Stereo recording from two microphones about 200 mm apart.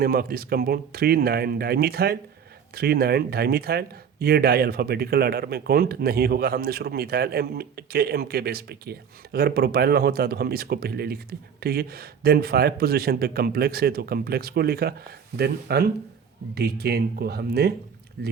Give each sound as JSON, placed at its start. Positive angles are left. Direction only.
{"t": 0.0, "sound": "speech", "side_deg": -50}